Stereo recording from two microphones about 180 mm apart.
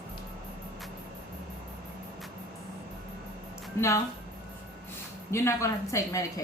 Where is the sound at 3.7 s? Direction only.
15° left (ahead or behind).